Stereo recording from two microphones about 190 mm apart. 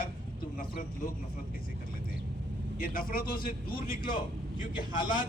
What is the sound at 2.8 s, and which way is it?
A man's voice, 50° left (ahead or behind).